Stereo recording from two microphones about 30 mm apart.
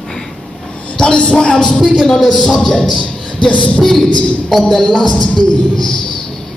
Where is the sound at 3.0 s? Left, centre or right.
Left.